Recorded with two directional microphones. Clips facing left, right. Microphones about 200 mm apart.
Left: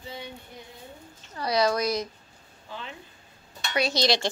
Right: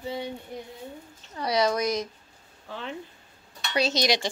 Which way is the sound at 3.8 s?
20° right (ahead or behind).